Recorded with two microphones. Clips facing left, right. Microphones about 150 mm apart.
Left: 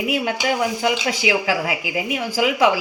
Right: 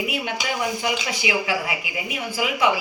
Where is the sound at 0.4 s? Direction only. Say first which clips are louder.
Left 5 dB; 65° left (ahead or behind).